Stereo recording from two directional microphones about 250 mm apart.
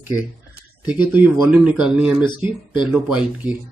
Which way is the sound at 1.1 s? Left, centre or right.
Centre.